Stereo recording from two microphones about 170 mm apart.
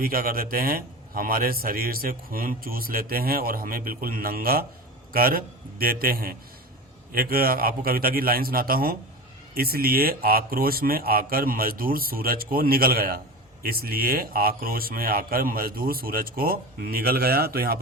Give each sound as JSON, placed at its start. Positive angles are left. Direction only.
{"t": 0.0, "sound": "speech", "side_deg": -60}